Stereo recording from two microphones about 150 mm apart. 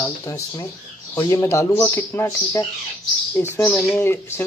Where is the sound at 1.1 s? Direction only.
20° left (ahead or behind).